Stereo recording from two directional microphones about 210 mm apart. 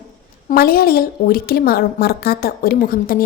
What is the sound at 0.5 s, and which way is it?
A woman's voice, 45° left (ahead or behind).